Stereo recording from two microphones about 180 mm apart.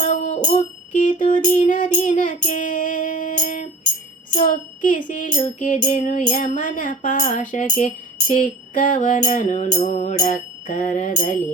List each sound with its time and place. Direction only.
0.1 s music: 40° left (ahead or behind)
4.4 s a sound: 45° left (ahead or behind)
5.5 s music: 45° left (ahead or behind)